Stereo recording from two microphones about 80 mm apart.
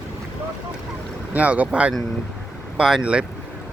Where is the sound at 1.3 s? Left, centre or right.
Centre.